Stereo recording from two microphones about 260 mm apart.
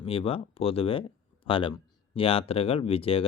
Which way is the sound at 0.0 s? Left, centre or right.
Left.